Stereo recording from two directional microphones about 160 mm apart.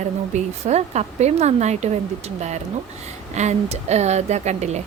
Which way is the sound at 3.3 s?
45° right (ahead or behind).